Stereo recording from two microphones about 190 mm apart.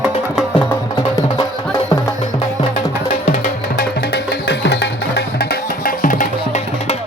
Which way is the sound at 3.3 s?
55° left (ahead or behind).